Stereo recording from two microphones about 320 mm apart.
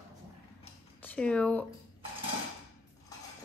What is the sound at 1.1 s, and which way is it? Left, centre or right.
Speech, centre.